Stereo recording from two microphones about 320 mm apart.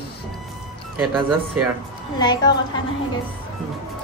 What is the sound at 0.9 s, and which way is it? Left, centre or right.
Speech, centre.